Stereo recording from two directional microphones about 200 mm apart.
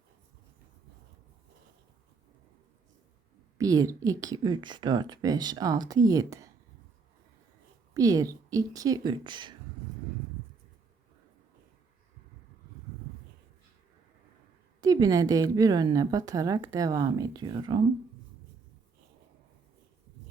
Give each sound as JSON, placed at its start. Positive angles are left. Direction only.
{"t": 3.6, "sound": "a woman's voice", "side_deg": -15}
{"t": 7.9, "sound": "a woman's voice", "side_deg": -15}
{"t": 14.8, "sound": "a woman's voice", "side_deg": -20}